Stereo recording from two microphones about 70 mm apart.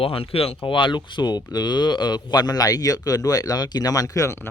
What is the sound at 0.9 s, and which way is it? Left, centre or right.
Speech, left.